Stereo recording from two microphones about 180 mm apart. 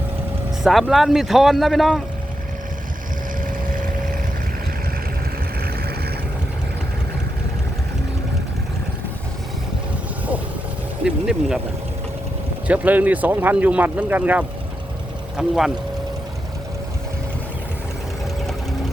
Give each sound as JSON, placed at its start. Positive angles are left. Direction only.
{"t": 0.6, "sound": "speech", "side_deg": 0}
{"t": 3.7, "sound": "vehicle", "side_deg": -50}
{"t": 11.0, "sound": "speech", "side_deg": -5}
{"t": 12.6, "sound": "speech", "side_deg": -10}